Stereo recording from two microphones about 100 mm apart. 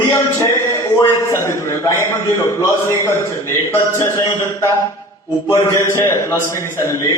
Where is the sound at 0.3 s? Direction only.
30° left (ahead or behind).